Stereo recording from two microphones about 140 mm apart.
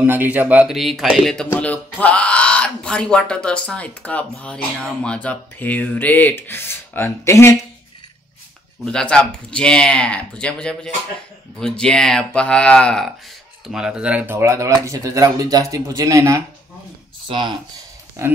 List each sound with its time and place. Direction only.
0.0 s speech: 15° right (ahead or behind); by 7.5 s 20° left (ahead or behind)
8.8 s speech: 5° left (ahead or behind); by 16.4 s 25° right (ahead or behind)
17.3 s speech: 35° right (ahead or behind)
18.2 s speech: 20° right (ahead or behind)